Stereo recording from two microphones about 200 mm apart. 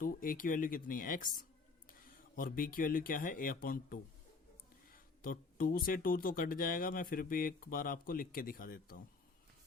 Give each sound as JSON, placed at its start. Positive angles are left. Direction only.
{"t": 0.0, "sound": "speech", "side_deg": 45}